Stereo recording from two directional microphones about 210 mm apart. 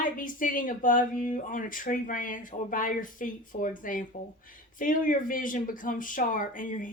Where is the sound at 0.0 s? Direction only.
40° left (ahead or behind).